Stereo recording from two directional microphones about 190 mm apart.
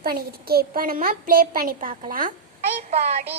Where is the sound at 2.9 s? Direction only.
35° right (ahead or behind).